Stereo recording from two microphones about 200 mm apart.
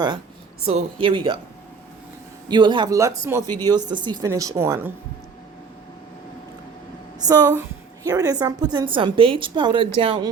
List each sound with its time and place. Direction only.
0.7 s a woman's voice: 30° right (ahead or behind)
2.5 s a woman's voice: 25° right (ahead or behind)
7.3 s a woman's voice: 20° right (ahead or behind)